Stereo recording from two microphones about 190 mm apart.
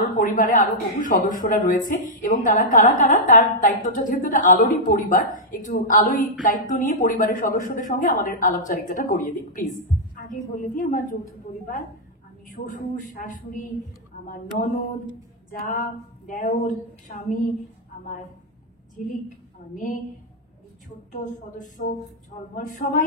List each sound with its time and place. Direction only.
0.0 s speech: 45° left (ahead or behind)
12.5 s speech: 45° left (ahead or behind)
19.0 s speech: 40° left (ahead or behind)
21.1 s speech: 40° left (ahead or behind)